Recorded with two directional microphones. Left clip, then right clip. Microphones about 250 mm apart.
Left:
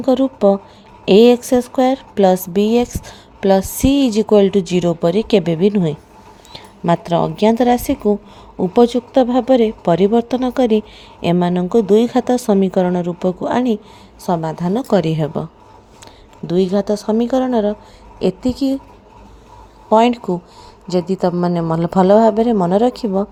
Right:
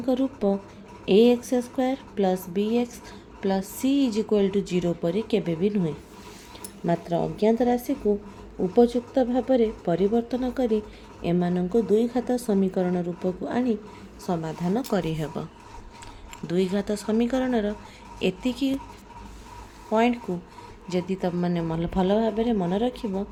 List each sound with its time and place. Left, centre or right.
0.0 s a woman's voice: left
16.5 s speech: left
19.9 s speech: left